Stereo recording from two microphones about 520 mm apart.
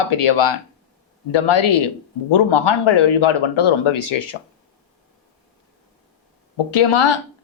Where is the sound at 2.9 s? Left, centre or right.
Left.